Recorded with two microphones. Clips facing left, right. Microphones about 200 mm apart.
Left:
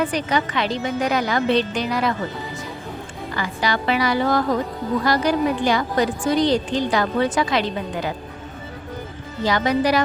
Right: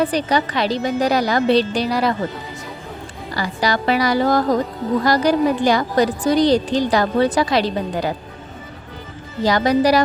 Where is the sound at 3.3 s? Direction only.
40° right (ahead or behind).